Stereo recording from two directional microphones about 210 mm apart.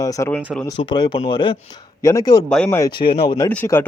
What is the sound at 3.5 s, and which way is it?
Speech, 10° left (ahead or behind).